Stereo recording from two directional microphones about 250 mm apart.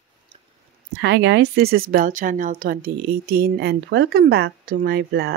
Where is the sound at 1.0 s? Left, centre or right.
Right.